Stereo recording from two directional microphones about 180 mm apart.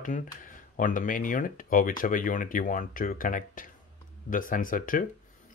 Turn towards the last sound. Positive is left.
turn(degrees=50)  # may be behind; listen again after turning